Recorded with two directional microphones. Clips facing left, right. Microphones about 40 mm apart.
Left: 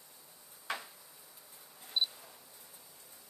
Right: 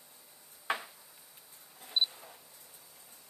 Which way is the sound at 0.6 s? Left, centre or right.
Centre.